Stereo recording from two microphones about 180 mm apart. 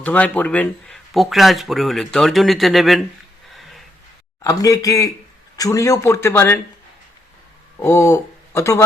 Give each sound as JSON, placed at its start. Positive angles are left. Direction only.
{"t": 0.0, "sound": "speech", "side_deg": 10}
{"t": 3.5, "sound": "a sound", "side_deg": 0}
{"t": 4.4, "sound": "speech", "side_deg": 20}
{"t": 7.8, "sound": "speech", "side_deg": 15}